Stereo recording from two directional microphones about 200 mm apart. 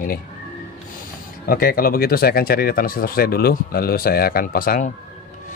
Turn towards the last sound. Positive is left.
turn(degrees=45)  # may be behind; listen again after turning